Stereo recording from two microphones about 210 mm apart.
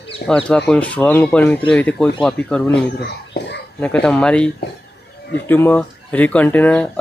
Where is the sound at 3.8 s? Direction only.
5° left (ahead or behind).